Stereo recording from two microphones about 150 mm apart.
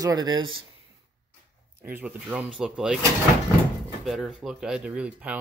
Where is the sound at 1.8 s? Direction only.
15° right (ahead or behind).